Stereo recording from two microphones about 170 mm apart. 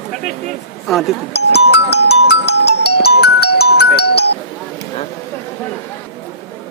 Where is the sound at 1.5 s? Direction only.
75° left (ahead or behind).